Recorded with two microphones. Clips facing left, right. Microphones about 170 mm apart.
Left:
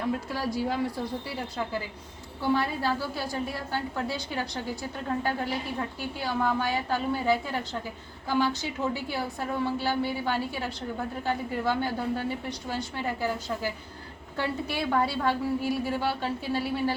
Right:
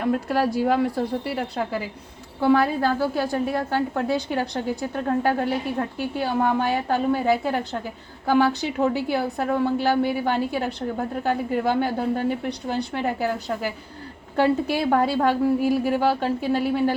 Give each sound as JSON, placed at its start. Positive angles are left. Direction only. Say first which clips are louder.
{"t": 0.0, "sound": "a woman's voice", "louder": "right 8 dB", "side_deg": -60}
{"t": 14.3, "sound": "a woman's voice", "louder": "right 10 dB", "side_deg": -60}